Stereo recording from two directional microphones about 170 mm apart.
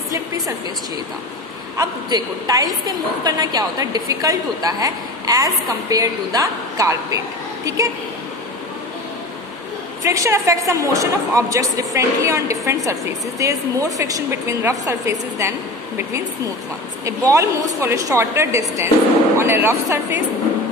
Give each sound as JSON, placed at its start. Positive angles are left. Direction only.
{"t": 0.1, "sound": "a woman's voice", "side_deg": -20}
{"t": 1.8, "sound": "a woman's voice", "side_deg": -25}
{"t": 10.0, "sound": "a woman's voice", "side_deg": -20}
{"t": 17.0, "sound": "a woman's voice", "side_deg": -20}